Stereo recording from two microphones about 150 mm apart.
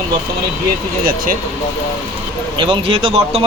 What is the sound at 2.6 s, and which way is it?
Speech, 35° right (ahead or behind).